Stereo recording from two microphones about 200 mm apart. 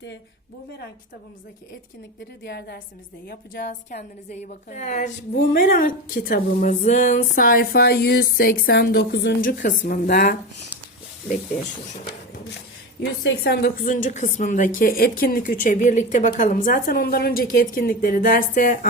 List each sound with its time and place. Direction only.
2.4 s a woman's voice: 55° left (ahead or behind)
3.2 s a woman's voice: 45° left (ahead or behind)
13.0 s a woman's voice: 55° left (ahead or behind)